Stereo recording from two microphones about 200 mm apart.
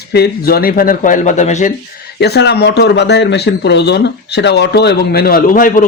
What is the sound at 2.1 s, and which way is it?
A man's voice, 55° left (ahead or behind).